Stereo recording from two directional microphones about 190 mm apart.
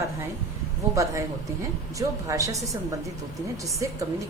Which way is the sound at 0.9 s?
15° right (ahead or behind).